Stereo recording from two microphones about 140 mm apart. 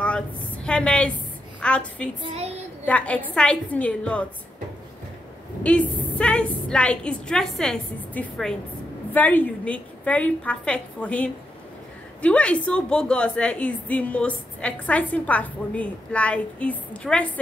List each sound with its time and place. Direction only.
0.7 s a woman's voice: 5° left (ahead or behind)
2.2 s a woman's voice: 50° right (ahead or behind)
2.8 s a woman's voice: 10° left (ahead or behind)
5.6 s a woman's voice: 10° left (ahead or behind)